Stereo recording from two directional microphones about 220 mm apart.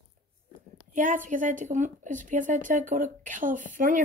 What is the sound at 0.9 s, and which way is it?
A woman's voice, 35° right (ahead or behind).